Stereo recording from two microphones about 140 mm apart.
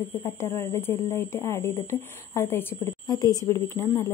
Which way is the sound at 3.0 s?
25° left (ahead or behind).